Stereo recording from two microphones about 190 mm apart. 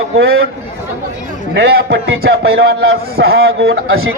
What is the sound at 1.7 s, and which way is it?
A man's voice, 60° right (ahead or behind).